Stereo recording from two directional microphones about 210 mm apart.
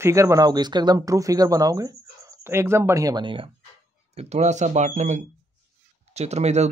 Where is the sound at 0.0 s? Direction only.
15° right (ahead or behind).